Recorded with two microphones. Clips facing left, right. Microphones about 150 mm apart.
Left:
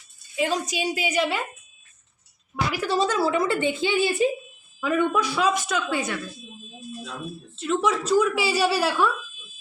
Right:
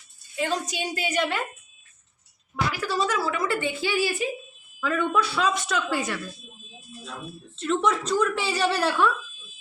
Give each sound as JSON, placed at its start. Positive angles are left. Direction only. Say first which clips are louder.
{"t": 0.3, "sound": "a woman's voice", "louder": "left 2 dB", "side_deg": 10}
{"t": 2.8, "sound": "a woman's voice", "louder": "left 5 dB", "side_deg": 25}
{"t": 7.5, "sound": "a woman's voice", "louder": "even", "side_deg": 5}